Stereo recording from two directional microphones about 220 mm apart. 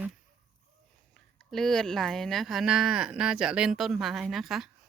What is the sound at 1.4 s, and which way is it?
Speech, centre (ahead or behind).